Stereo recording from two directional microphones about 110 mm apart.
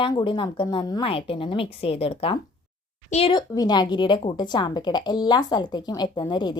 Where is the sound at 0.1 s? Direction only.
45° left (ahead or behind).